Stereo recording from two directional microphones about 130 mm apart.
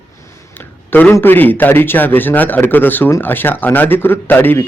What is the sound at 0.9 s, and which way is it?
A man's voice, 15° left (ahead or behind).